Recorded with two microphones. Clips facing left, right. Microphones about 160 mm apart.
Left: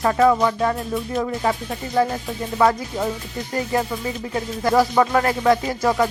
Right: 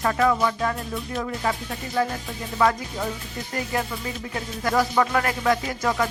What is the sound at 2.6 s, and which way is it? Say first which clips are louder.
Music: left 3 dB; 30° left (ahead or behind).